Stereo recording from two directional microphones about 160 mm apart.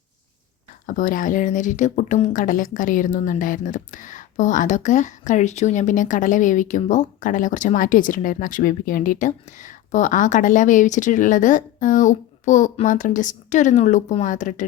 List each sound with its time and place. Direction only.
0.9 s speech: 55° left (ahead or behind)